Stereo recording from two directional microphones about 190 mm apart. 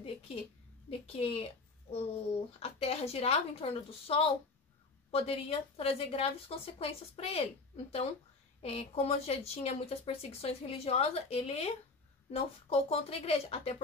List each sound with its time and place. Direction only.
0.8 s speech: 30° left (ahead or behind)